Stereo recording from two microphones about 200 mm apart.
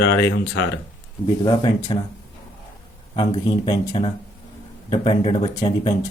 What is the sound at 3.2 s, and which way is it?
Speech, 25° left (ahead or behind).